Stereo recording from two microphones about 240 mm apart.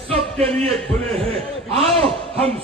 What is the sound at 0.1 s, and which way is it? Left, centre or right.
A man's voice, right.